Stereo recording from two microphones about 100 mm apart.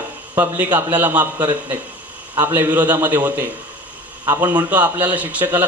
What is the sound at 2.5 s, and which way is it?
A man's voice, 20° right (ahead or behind).